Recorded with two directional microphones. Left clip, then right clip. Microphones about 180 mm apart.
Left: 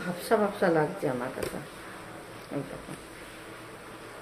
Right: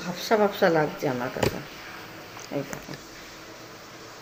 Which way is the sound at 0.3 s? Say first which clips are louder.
Right 4 dB; 25° right (ahead or behind).